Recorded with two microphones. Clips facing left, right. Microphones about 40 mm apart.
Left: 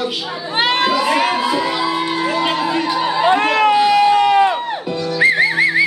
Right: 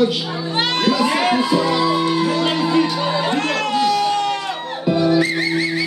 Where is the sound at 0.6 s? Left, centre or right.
Centre.